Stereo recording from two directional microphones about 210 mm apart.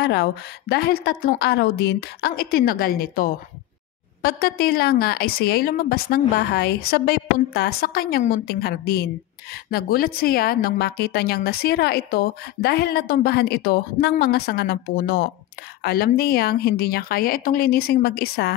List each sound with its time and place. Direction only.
0.0 s a woman's voice: 50° left (ahead or behind)